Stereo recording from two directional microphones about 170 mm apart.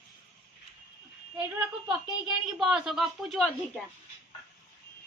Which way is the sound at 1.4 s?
10° right (ahead or behind).